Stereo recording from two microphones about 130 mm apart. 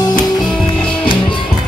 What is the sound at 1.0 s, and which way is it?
Music, 40° left (ahead or behind).